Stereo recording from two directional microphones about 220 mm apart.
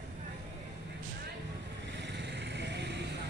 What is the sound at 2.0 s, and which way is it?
Vehicle, 50° right (ahead or behind).